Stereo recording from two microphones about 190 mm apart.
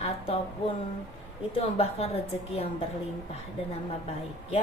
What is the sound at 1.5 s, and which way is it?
Speech, 30° left (ahead or behind).